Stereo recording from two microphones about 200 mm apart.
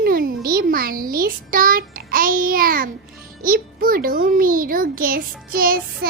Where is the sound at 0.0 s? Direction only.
45° right (ahead or behind).